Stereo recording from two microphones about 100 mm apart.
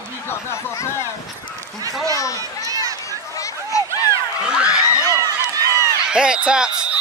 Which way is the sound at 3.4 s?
35° left (ahead or behind).